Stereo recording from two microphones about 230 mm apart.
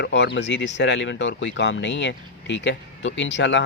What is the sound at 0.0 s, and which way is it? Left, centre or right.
Speech, left.